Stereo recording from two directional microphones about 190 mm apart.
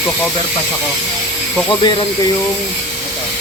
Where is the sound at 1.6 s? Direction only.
25° left (ahead or behind).